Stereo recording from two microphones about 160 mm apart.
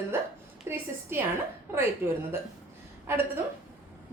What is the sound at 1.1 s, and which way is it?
A woman's voice, 15° right (ahead or behind).